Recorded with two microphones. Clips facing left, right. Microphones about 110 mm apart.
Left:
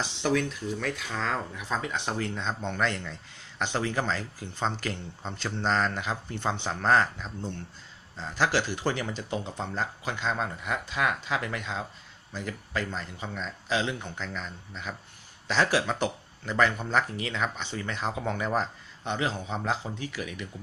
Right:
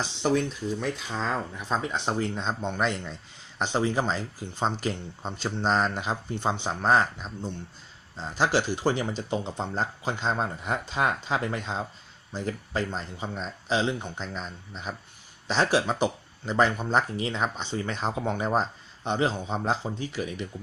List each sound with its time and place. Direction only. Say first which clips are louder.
0.0 s speech: right 2 dB; 20° right (ahead or behind)